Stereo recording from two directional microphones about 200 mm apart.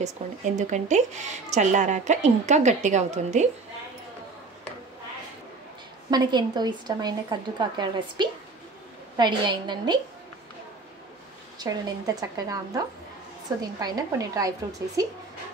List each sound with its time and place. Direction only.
0.2 s a woman's voice: 35° right (ahead or behind)
6.0 s speech: 20° right (ahead or behind)
11.5 s speech: 20° right (ahead or behind)